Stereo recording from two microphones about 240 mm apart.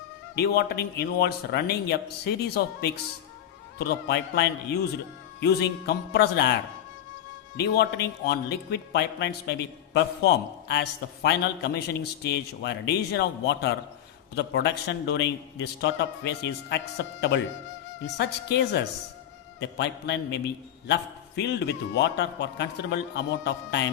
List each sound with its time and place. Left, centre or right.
0.3 s a man's voice: left